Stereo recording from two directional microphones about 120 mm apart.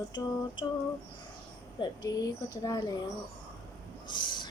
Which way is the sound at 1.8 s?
35° left (ahead or behind).